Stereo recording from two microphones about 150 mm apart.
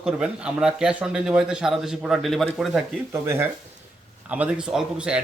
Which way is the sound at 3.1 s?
15° right (ahead or behind).